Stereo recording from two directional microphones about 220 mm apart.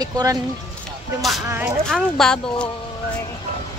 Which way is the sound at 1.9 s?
5° left (ahead or behind).